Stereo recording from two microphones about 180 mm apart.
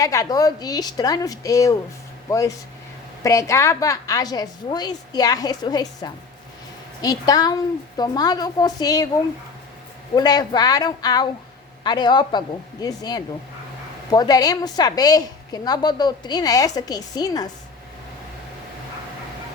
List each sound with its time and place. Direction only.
0.0 s a woman's voice: 20° left (ahead or behind)
3.2 s a woman's voice: 15° left (ahead or behind)
10.2 s a woman's voice: 20° left (ahead or behind)